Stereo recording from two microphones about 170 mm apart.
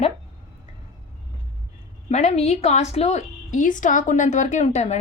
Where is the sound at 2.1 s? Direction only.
40° left (ahead or behind).